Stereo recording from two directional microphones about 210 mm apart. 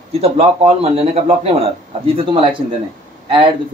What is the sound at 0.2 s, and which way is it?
A man's voice, 30° right (ahead or behind).